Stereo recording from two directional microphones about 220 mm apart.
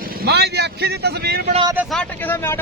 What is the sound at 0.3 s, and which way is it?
A man's voice, 50° right (ahead or behind).